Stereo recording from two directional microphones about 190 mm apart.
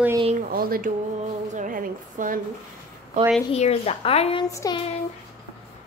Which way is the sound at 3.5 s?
35° left (ahead or behind).